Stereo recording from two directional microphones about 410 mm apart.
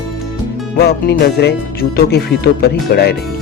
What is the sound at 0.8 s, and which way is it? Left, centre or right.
Speech, left.